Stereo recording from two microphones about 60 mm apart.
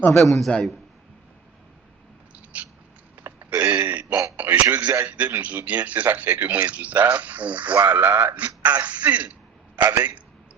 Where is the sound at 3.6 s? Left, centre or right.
Right.